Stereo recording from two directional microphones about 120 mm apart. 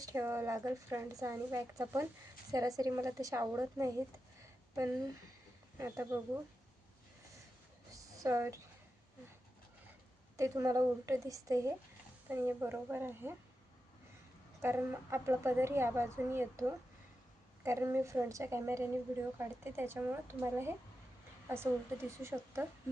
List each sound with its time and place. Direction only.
0.0 s speech: 25° right (ahead or behind)
7.9 s a sound: 30° right (ahead or behind)
10.3 s speech: 25° right (ahead or behind)
14.6 s speech: 20° right (ahead or behind)